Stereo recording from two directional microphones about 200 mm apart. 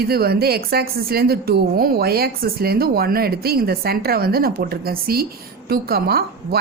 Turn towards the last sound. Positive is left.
turn(degrees=-50)  # may be behind; listen again after turning